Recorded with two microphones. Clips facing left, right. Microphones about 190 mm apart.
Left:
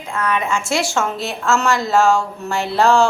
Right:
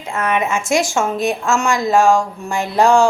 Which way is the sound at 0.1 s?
25° right (ahead or behind).